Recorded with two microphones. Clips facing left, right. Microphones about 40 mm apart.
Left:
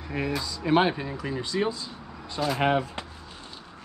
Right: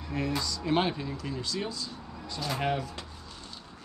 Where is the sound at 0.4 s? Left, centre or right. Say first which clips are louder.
Left 7 dB; centre.